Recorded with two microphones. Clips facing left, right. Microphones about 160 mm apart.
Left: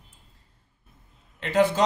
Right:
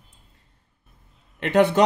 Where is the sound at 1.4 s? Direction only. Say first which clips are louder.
Right 4 dB; 65° right (ahead or behind).